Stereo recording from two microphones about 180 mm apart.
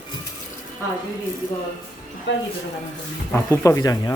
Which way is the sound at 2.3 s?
80° left.